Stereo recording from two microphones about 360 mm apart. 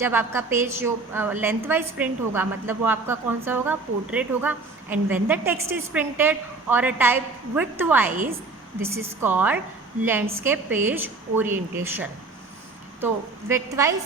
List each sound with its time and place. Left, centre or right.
0.0 s a woman's voice: centre
13.5 s a woman's voice: centre